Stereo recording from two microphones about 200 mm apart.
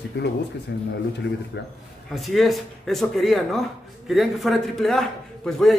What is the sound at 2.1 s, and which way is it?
A man's voice, centre (ahead or behind).